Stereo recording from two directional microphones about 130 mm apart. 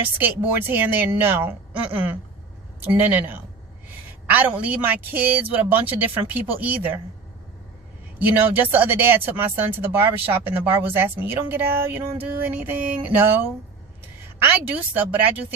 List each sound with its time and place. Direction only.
0.2 s speech: 15° right (ahead or behind)
3.8 s a sound: 15° right (ahead or behind)
4.6 s speech: 15° right (ahead or behind)
8.2 s a woman's voice: 15° right (ahead or behind)